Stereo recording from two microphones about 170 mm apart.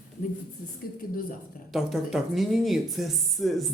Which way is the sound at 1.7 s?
Centre (ahead or behind).